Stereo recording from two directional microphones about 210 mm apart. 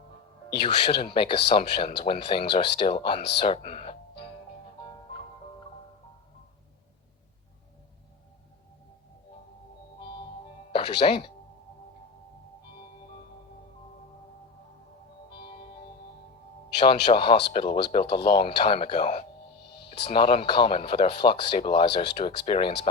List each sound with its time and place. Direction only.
0.9 s speech: 25° left (ahead or behind)
10.7 s speech: 25° left (ahead or behind)
16.8 s speech: 25° left (ahead or behind)